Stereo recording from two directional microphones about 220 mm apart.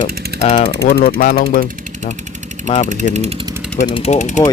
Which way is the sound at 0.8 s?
40° left (ahead or behind).